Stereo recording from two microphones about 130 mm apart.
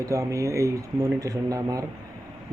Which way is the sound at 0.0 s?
25° right (ahead or behind).